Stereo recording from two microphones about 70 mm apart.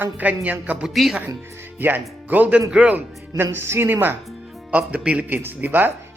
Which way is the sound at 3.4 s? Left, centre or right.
Right.